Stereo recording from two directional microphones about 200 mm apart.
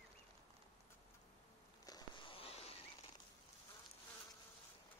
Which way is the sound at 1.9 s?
20° left (ahead or behind).